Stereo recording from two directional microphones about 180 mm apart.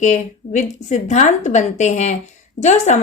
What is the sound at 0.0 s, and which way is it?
A woman's voice, 40° left (ahead or behind).